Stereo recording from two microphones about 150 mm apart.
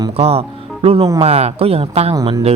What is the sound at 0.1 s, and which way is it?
Speech, 40° right (ahead or behind).